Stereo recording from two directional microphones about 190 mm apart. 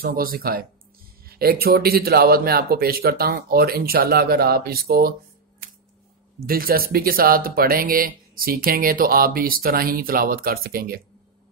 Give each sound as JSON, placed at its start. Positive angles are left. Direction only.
{"t": 0.0, "sound": "speech", "side_deg": -50}
{"t": 6.4, "sound": "speech", "side_deg": -50}